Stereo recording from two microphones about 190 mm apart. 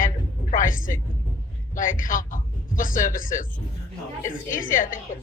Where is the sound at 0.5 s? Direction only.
45° left (ahead or behind).